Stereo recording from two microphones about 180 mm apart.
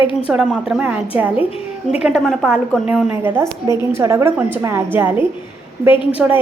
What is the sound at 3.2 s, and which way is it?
A woman's voice, 15° right (ahead or behind).